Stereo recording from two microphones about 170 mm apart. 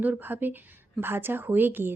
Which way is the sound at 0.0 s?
10° right (ahead or behind).